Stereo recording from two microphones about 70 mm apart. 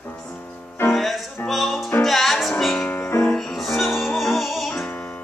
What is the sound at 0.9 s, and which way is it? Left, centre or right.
Music, centre.